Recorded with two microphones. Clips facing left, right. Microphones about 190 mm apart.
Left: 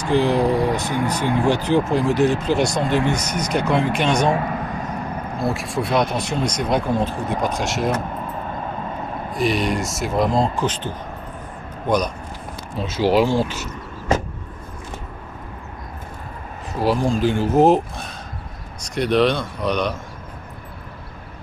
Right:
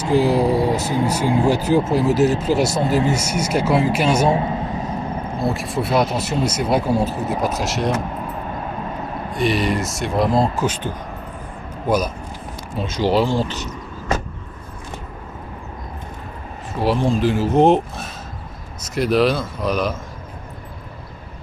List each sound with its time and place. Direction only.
0.1 s speech: 5° right (ahead or behind)
4.3 s vehicle: 25° right (ahead or behind)
5.4 s speech: centre (ahead or behind)
9.3 s speech: centre (ahead or behind)
16.8 s speech: centre (ahead or behind)